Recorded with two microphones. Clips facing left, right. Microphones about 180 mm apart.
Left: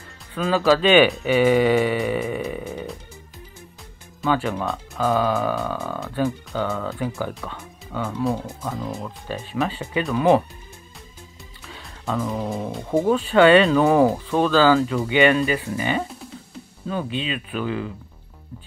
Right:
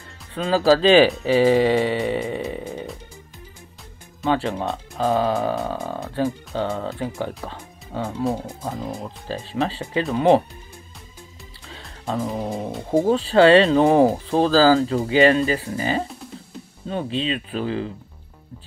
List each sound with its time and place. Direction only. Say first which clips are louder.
0.3 s speech: right 1 dB; 30° right (ahead or behind)
4.2 s speech: even; 30° right (ahead or behind)
11.6 s music: even; 30° right (ahead or behind)
12.9 s speech: right 1 dB; 30° right (ahead or behind)